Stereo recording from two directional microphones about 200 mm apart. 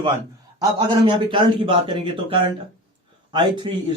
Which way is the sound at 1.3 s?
25° right (ahead or behind).